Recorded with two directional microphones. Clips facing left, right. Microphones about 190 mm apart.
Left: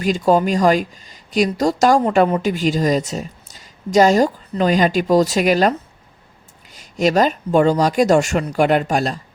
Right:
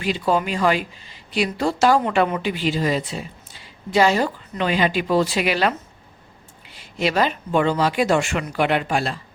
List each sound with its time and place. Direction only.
0.0 s a woman's voice: 45° left (ahead or behind)